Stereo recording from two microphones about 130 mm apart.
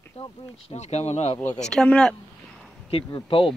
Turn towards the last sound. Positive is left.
turn(degrees=40)  # may be behind; listen again after turning